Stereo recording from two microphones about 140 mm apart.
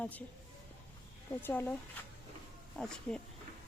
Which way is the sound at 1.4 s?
15° left (ahead or behind).